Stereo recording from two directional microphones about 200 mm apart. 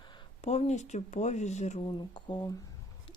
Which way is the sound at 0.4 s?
35° left (ahead or behind).